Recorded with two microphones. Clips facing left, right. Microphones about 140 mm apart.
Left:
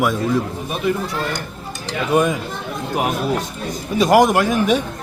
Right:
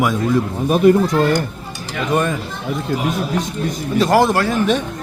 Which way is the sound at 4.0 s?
15° left (ahead or behind).